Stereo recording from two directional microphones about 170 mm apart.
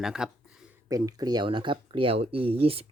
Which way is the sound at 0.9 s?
20° right (ahead or behind).